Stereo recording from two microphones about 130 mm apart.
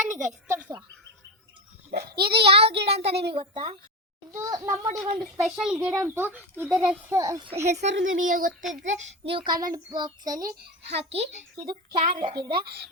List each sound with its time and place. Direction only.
0.0 s a sound: 75° right (ahead or behind)
0.4 s a child's voice: 20° right (ahead or behind)
2.1 s a child's voice: 50° right (ahead or behind)
4.3 s a child's voice: 25° right (ahead or behind)
4.9 s speech: 5° right (ahead or behind)
6.1 s a child's voice: 15° right (ahead or behind)
7.7 s speech: 75° right (ahead or behind)
8.7 s a child's voice: 70° right (ahead or behind)
9.3 s speech: 35° right (ahead or behind)
11.1 s a child's voice: 60° right (ahead or behind)
11.6 s speech: 40° right (ahead or behind)